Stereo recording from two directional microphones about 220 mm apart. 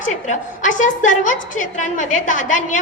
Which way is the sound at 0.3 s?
35° left (ahead or behind).